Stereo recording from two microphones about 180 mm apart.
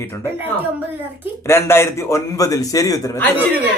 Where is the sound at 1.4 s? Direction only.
15° left (ahead or behind).